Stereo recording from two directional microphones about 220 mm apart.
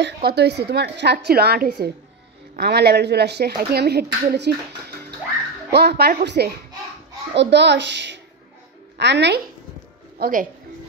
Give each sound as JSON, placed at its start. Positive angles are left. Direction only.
{"t": 0.0, "sound": "speech", "side_deg": -50}
{"t": 10.1, "sound": "speech", "side_deg": -40}